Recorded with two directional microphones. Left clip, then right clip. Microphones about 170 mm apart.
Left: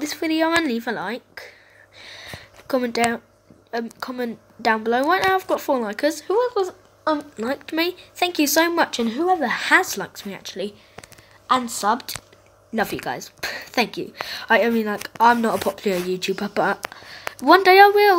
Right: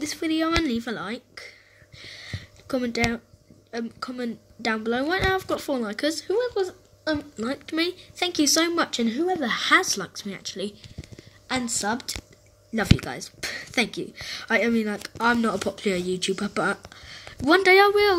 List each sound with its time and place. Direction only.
0.0 s speech: 10° right (ahead or behind)
2.0 s a sound: 10° right (ahead or behind)
3.7 s speech: 10° right (ahead or behind)
11.7 s speech: 20° right (ahead or behind)
16.9 s a sound: 15° right (ahead or behind)
17.5 s speech: 20° right (ahead or behind)